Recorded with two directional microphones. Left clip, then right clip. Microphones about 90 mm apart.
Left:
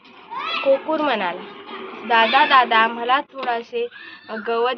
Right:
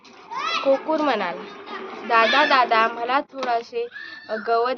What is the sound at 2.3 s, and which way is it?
Speech, 45° right (ahead or behind).